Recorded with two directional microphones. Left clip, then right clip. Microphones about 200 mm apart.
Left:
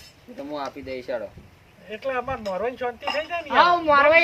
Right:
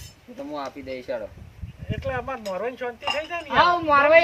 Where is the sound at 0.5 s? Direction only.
15° left (ahead or behind).